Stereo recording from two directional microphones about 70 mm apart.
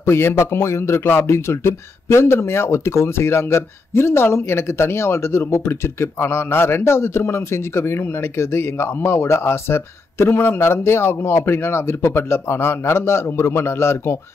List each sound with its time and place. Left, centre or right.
0.0 s speech: left